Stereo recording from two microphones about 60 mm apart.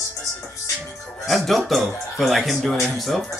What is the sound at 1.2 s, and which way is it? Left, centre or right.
Speech, centre.